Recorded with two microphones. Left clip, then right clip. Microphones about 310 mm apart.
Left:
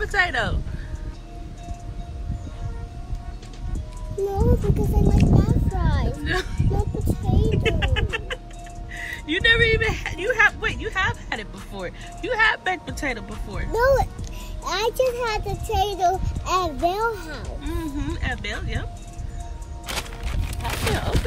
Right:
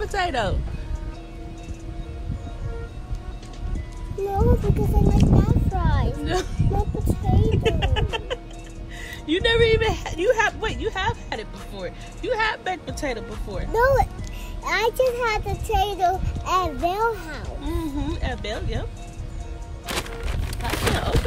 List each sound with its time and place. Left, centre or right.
0.0 s speech: centre
4.4 s speech: centre
7.5 s a sound: centre
8.9 s speech: centre